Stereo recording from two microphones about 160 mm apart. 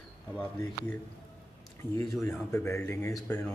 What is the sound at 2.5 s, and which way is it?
Speech, 15° left (ahead or behind).